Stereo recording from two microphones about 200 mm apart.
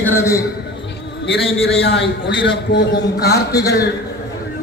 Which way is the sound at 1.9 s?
60° left (ahead or behind).